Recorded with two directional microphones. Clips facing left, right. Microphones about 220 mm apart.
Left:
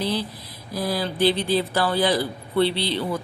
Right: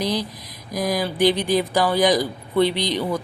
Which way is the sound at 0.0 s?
15° right (ahead or behind).